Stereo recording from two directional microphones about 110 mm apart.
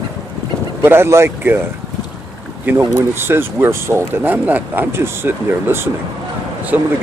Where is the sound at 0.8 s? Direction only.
20° right (ahead or behind).